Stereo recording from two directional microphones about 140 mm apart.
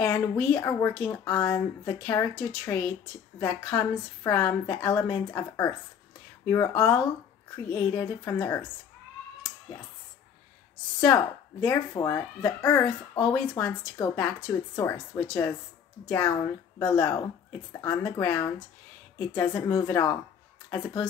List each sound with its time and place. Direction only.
0.0 s a sound: 20° left (ahead or behind)
0.4 s speech: 15° left (ahead or behind)
11.6 s speech: 20° left (ahead or behind)
16.7 s speech: 20° left (ahead or behind)